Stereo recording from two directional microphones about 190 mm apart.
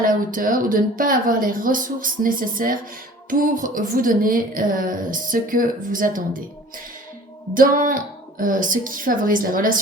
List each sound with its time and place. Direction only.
0.0 s a woman's voice: 45° right (ahead or behind)
7.5 s a woman's voice: 45° right (ahead or behind)